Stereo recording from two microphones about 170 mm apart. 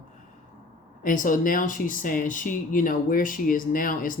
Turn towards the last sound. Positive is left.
turn(degrees=55)  # may be behind; listen again after turning